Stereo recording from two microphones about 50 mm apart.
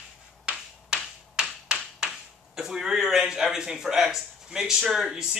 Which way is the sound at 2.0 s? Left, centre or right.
Centre.